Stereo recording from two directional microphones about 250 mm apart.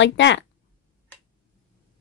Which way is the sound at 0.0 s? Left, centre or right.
Left.